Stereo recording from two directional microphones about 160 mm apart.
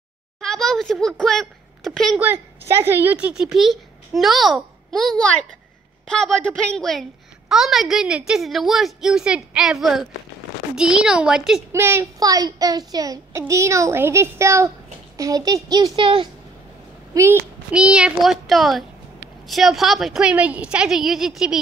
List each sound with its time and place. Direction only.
0.4 s speech: 5° left (ahead or behind)
2.1 s a woman's voice: 10° right (ahead or behind)
11.7 s a child's voice: 15° right (ahead or behind)
16.0 s speech: 35° right (ahead or behind)
17.1 s speech: 15° right (ahead or behind)
17.7 s a woman's voice: 5° right (ahead or behind)